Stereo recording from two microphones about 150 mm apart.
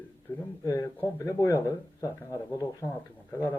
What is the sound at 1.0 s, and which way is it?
Speech, 20° left (ahead or behind).